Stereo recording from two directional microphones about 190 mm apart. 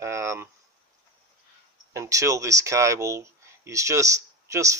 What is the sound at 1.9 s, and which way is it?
Speech, 15° right (ahead or behind).